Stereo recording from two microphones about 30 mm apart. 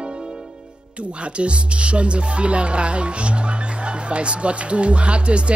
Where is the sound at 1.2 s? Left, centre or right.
Right.